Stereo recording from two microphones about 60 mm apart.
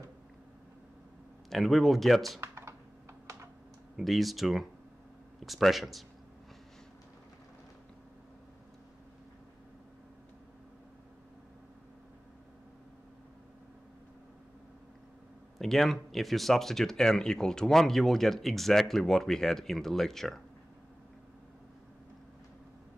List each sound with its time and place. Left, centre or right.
1.5 s speech: centre
2.4 s computer keyboard: right
3.9 s speech: centre
15.6 s speech: centre